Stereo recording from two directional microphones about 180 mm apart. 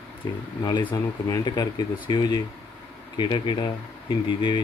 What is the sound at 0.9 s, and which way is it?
Speech, 20° left (ahead or behind).